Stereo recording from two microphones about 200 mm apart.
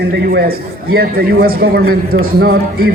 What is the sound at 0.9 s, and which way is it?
A man's voice, 50° right (ahead or behind).